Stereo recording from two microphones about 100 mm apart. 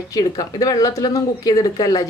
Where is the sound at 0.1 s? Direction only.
40° left (ahead or behind).